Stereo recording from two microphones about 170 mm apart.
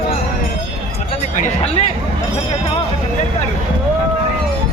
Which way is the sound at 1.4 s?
40° left (ahead or behind).